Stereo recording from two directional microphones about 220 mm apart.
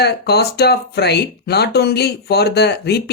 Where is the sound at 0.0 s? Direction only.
45° left (ahead or behind).